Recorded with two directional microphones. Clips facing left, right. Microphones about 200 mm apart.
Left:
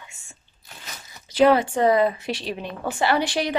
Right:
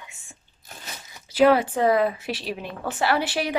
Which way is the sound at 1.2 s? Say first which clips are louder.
Left 1 dB; 5° right (ahead or behind).